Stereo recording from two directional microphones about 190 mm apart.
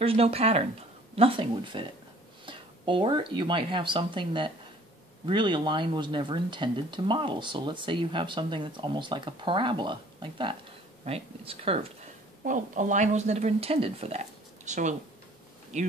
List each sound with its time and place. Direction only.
0.0 s a woman's voice: 30° right (ahead or behind)
12.4 s a woman's voice: 40° right (ahead or behind)